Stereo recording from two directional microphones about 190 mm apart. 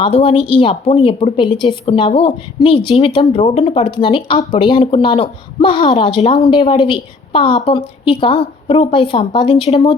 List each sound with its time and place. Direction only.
0.0 s a woman's voice: 30° left (ahead or behind)